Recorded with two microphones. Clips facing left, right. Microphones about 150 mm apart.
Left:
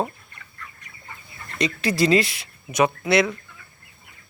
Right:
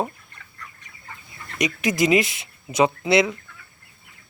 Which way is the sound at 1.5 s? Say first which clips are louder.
Even; 15° right (ahead or behind).